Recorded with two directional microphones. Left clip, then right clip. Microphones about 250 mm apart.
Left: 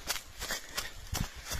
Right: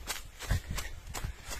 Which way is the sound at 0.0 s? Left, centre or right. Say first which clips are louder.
Left 3 dB; left.